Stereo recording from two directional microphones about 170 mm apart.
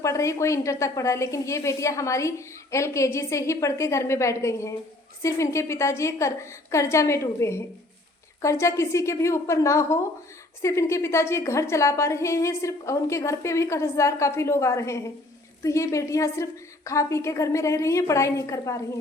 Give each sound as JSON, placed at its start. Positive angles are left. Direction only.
{"t": 0.0, "sound": "a woman's voice", "side_deg": 20}